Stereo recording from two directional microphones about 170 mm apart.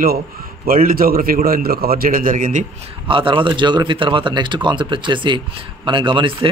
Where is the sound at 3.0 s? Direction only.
30° right (ahead or behind).